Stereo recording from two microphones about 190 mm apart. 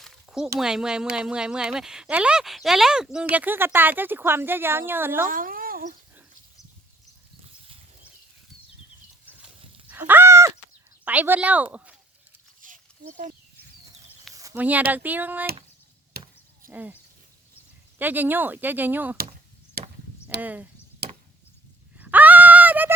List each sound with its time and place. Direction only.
0.0 s a sound: 5° right (ahead or behind)
0.6 s speech: 5° right (ahead or behind)
5.3 s speech: 45° right (ahead or behind)
9.9 s a sound: 10° right (ahead or behind)
11.0 s speech: 10° right (ahead or behind)
12.6 s a sound: 45° right (ahead or behind)
14.3 s speech: 15° right (ahead or behind)
16.1 s chop: 50° right (ahead or behind)
16.6 s speech: 10° right (ahead or behind)
18.0 s speech: 10° right (ahead or behind)
19.8 s chop: 55° right (ahead or behind)
20.4 s speech: 10° right (ahead or behind)
21.9 s dog: 10° right (ahead or behind)